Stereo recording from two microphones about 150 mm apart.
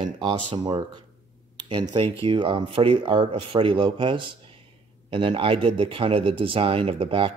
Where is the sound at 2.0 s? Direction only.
35° right (ahead or behind).